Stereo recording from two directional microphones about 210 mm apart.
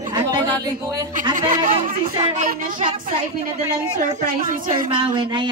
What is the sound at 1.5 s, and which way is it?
Music, 35° right (ahead or behind).